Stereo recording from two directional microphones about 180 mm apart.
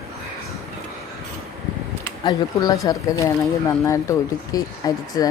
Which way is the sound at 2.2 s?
20° left (ahead or behind).